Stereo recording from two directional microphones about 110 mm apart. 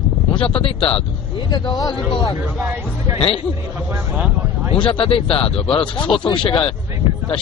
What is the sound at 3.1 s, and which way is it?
Speech, 65° left (ahead or behind).